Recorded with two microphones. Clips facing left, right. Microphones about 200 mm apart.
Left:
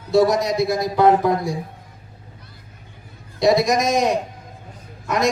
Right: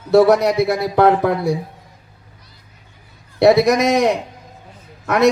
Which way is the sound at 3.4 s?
65° right (ahead or behind).